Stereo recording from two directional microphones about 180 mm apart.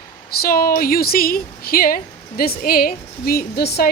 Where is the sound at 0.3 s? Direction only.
55° left (ahead or behind).